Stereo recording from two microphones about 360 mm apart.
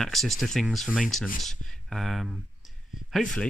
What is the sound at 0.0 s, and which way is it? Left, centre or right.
Speech, centre.